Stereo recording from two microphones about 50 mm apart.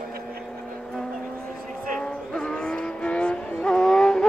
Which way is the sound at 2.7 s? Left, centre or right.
Left.